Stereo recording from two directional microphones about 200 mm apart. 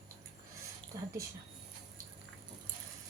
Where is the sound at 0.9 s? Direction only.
20° right (ahead or behind).